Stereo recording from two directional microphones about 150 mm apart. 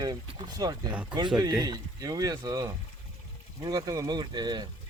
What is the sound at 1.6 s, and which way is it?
Speech, 25° right (ahead or behind).